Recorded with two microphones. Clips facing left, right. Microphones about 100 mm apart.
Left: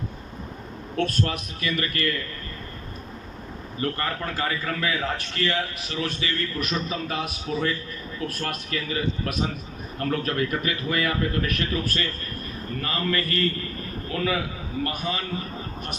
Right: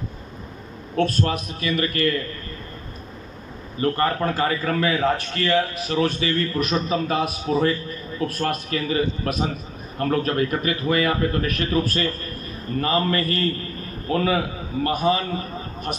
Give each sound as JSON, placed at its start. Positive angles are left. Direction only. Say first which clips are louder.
{"t": 0.9, "sound": "a man's voice", "louder": "right 4 dB", "side_deg": -30}
{"t": 3.8, "sound": "a man's voice", "louder": "right 7 dB", "side_deg": -35}
{"t": 12.8, "sound": "a man's voice", "louder": "right 5 dB", "side_deg": -30}